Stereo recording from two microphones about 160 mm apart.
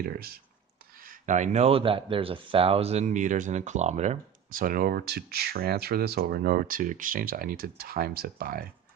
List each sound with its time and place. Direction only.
0.0 s speech: 70° right (ahead or behind)
1.0 s speech: 50° right (ahead or behind)
4.5 s speech: 60° right (ahead or behind)